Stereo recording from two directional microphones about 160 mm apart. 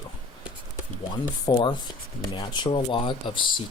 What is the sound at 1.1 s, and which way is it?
Speech, 25° left (ahead or behind).